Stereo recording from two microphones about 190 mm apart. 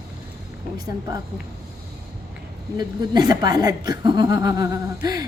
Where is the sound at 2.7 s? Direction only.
20° right (ahead or behind).